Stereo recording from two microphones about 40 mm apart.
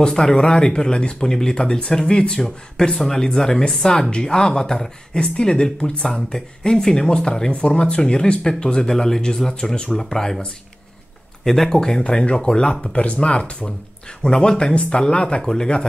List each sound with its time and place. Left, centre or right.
0.0 s speech: centre
11.4 s speech: centre
12.9 s speech: left
15.4 s speech: centre